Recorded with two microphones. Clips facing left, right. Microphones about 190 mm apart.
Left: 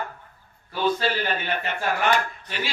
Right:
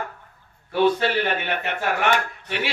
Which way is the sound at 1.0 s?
70° right (ahead or behind).